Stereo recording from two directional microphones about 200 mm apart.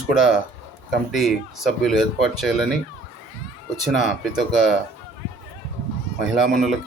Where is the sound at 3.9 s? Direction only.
Centre (ahead or behind).